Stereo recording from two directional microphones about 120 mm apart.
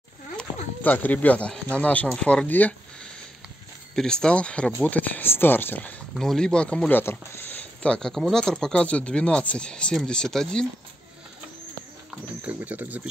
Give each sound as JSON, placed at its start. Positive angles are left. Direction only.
{"t": 0.4, "sound": "speech", "side_deg": 15}
{"t": 6.1, "sound": "speech", "side_deg": 5}
{"t": 12.4, "sound": "speech", "side_deg": -15}